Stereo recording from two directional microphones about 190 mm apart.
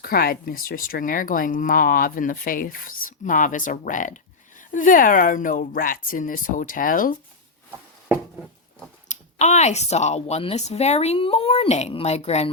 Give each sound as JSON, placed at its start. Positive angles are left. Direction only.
{"t": 0.0, "sound": "speech", "side_deg": 50}
{"t": 9.0, "sound": "speech", "side_deg": 40}